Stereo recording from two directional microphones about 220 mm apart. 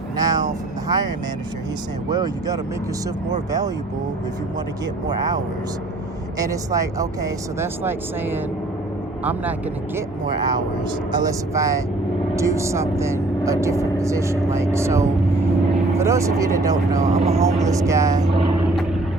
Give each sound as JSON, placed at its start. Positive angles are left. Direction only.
{"t": 0.2, "sound": "vehicle", "side_deg": -15}
{"t": 2.0, "sound": "speech", "side_deg": -15}
{"t": 6.4, "sound": "speech", "side_deg": -15}
{"t": 10.3, "sound": "speech", "side_deg": -20}
{"t": 17.1, "sound": "speech", "side_deg": -30}
{"t": 17.6, "sound": "speech", "side_deg": -15}